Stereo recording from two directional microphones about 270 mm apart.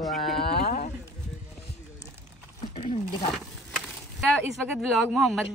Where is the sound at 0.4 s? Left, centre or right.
Left.